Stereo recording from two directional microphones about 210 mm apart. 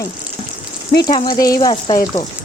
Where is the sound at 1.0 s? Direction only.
20° left (ahead or behind).